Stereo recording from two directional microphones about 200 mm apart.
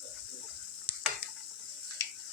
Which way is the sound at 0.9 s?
25° left (ahead or behind).